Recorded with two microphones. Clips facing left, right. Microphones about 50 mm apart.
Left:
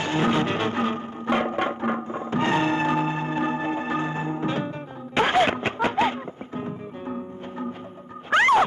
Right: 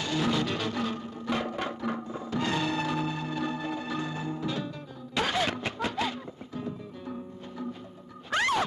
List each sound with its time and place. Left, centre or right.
0.0 s music: left
8.3 s music: left